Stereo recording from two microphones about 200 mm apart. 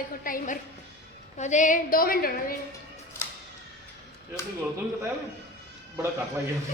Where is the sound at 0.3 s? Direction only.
40° left (ahead or behind).